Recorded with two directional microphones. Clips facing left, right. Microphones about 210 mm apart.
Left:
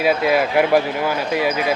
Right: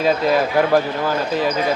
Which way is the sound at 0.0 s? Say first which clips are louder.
Even; 10° left (ahead or behind).